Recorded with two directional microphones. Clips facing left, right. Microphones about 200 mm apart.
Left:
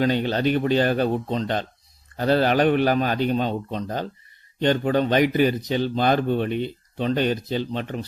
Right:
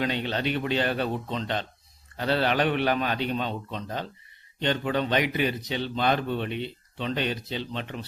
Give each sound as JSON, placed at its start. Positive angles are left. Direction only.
{"t": 0.0, "sound": "speech", "side_deg": 40}